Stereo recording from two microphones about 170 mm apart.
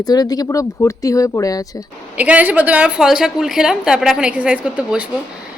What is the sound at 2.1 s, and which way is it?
A woman's voice, 10° right (ahead or behind).